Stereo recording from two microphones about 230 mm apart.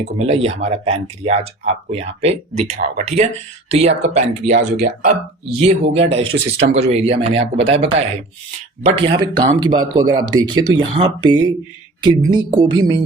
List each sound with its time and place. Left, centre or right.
0.0 s speech: right
4.8 s speech: right
5.9 s speech: right